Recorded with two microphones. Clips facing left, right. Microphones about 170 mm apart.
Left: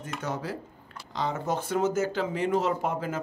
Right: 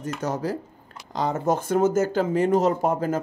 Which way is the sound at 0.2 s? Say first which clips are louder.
Right 6 dB; 40° right (ahead or behind).